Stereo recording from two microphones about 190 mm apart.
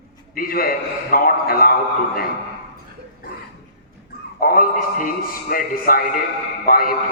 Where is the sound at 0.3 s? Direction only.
50° left (ahead or behind).